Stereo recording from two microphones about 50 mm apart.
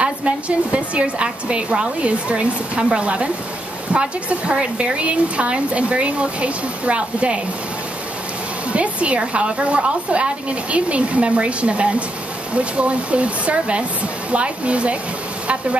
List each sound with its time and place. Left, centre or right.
0.0 s speech: right
8.7 s speech: right